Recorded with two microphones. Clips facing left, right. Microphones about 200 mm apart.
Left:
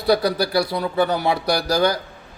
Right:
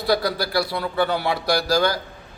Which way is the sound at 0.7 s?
20° left (ahead or behind).